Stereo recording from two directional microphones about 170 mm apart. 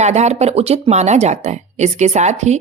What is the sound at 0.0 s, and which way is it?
Speech, 40° right (ahead or behind).